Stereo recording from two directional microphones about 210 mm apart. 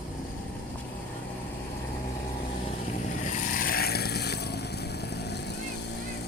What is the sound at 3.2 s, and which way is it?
Vehicle, 40° left (ahead or behind).